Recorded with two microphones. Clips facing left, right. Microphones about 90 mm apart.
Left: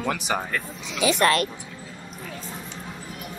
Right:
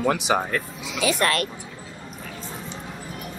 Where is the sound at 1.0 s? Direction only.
25° left (ahead or behind).